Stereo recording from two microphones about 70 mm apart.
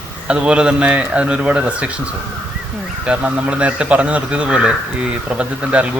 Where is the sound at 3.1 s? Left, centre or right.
Centre.